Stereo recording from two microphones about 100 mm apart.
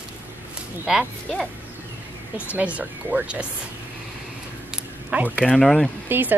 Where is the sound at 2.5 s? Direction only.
15° right (ahead or behind).